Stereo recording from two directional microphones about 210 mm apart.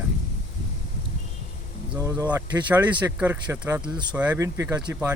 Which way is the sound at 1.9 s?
15° right (ahead or behind).